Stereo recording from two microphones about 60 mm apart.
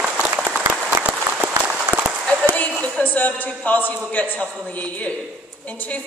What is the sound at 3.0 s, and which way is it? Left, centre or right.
A man's voice, left.